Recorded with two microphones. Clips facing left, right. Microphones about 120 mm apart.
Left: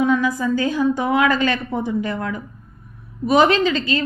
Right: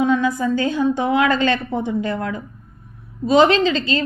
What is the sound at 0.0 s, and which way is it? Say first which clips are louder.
A woman's voice: right 1 dB; 25° right (ahead or behind).